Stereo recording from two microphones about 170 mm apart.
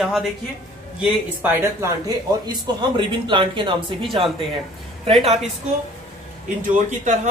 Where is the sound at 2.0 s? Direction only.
25° right (ahead or behind).